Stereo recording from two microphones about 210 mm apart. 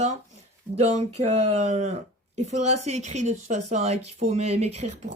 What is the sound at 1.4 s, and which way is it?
A woman's voice, 30° right (ahead or behind).